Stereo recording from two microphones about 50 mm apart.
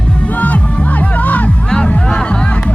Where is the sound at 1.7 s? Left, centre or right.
Centre.